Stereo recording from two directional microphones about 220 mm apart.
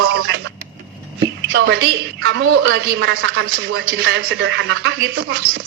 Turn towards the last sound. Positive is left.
turn(degrees=-55)  # may be behind; listen again after turning